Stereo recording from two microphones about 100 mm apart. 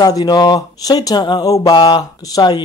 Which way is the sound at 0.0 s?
40° left (ahead or behind).